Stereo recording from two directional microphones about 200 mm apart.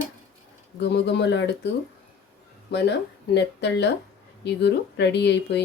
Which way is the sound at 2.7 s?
60° left (ahead or behind).